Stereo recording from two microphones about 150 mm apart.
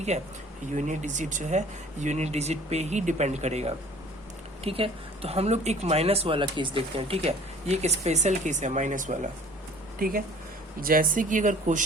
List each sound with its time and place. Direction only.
0.8 s speech: 55° right (ahead or behind)
10.0 s speech: 75° right (ahead or behind); by 11.8 s 60° right (ahead or behind)